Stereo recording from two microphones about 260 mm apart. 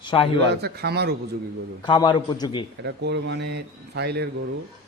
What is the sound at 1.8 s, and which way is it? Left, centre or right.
Speech, centre.